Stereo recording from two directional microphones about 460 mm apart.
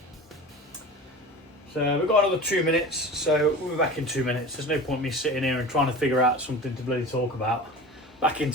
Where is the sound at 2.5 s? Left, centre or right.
Centre.